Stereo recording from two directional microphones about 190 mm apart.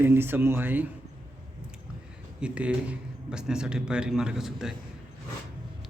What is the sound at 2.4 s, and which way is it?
A man's voice, 5° right (ahead or behind).